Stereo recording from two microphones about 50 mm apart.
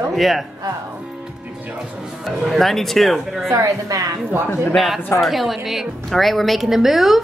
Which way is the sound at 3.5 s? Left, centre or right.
Right.